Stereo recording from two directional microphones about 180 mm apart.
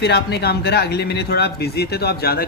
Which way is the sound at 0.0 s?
65° left (ahead or behind).